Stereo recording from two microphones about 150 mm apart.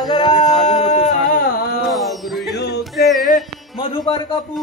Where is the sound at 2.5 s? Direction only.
90° left.